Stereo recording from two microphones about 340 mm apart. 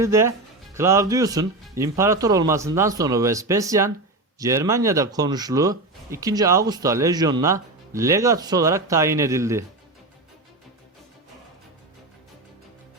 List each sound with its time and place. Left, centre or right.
0.0 s speech: centre